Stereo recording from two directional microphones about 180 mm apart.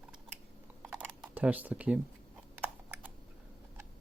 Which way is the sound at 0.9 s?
10° right (ahead or behind).